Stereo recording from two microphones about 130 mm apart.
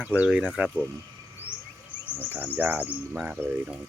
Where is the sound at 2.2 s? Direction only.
15° right (ahead or behind).